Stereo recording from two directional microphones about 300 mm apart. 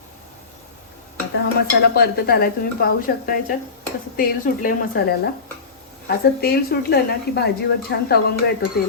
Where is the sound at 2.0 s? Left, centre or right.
Left.